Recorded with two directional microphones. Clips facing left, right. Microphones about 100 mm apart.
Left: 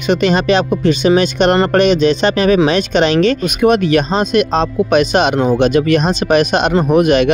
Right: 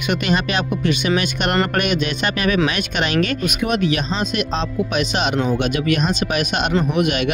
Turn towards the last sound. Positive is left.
turn(degrees=45)  # may be behind; listen again after turning